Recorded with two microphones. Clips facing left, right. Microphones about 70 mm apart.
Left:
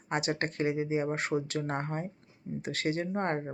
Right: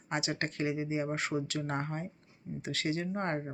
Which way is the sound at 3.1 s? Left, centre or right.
Left.